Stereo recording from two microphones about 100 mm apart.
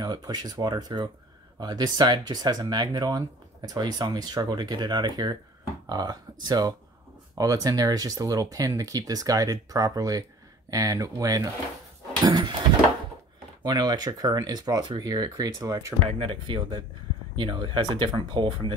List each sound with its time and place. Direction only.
0.0 s speech: 40° right (ahead or behind)
12.3 s speech: 50° right (ahead or behind)
13.7 s speech: 45° right (ahead or behind)
16.1 s speech: 65° right (ahead or behind)